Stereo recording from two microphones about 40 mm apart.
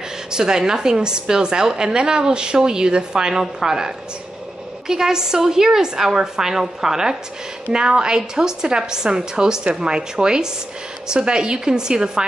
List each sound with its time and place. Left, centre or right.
0.3 s a woman's voice: centre